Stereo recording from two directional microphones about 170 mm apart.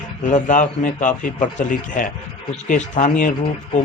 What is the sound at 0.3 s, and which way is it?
A man's voice, 45° left (ahead or behind).